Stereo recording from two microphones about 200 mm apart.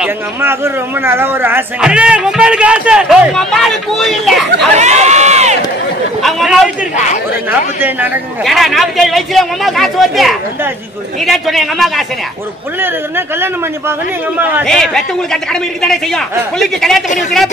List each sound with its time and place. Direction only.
0.0 s speech: 10° right (ahead or behind)
4.7 s speech: 35° right (ahead or behind)
6.2 s speech: centre (ahead or behind)
8.5 s speech: centre (ahead or behind)
12.8 s a man's voice: 10° right (ahead or behind)
14.6 s speech: centre (ahead or behind)